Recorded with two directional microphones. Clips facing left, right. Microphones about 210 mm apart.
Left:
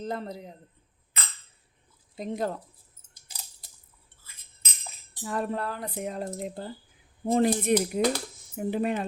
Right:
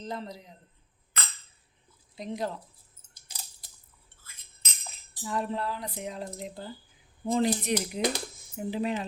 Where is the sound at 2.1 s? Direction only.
50° left (ahead or behind).